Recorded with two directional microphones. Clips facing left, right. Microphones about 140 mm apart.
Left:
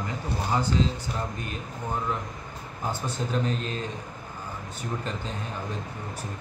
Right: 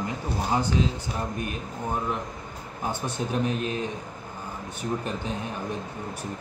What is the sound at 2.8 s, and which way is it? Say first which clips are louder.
A man's voice: right 1 dB; 15° right (ahead or behind).